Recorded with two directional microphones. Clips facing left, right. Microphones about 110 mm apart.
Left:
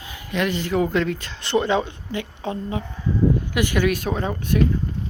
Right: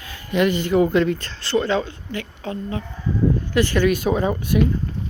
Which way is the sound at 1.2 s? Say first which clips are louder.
Even; 10° left (ahead or behind).